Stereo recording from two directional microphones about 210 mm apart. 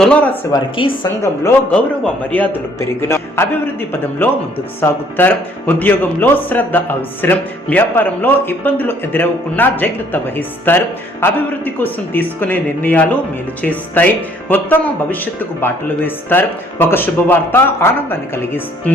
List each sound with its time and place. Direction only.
0.0 s a man's voice: 5° left (ahead or behind)
0.5 s a woman's voice: 25° left (ahead or behind)
1.2 s a man's voice: 10° left (ahead or behind)